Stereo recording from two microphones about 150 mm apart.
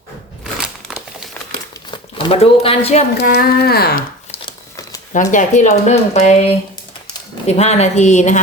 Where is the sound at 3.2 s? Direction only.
85° left.